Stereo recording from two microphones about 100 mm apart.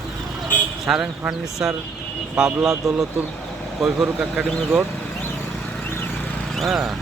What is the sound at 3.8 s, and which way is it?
Speech, 5° right (ahead or behind).